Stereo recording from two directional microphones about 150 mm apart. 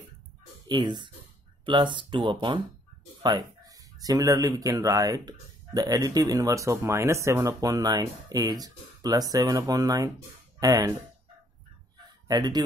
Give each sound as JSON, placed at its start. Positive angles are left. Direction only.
{"t": 0.7, "sound": "speech", "side_deg": -30}
{"t": 12.3, "sound": "speech", "side_deg": -25}